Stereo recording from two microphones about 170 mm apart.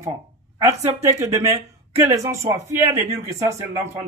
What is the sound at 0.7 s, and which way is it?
Speech, 15° right (ahead or behind).